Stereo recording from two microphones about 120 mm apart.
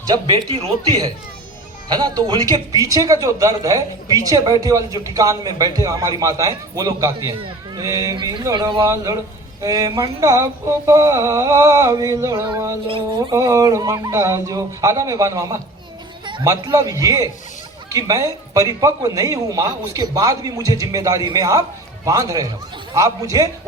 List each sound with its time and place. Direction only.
0.1 s a woman's voice: 35° right (ahead or behind)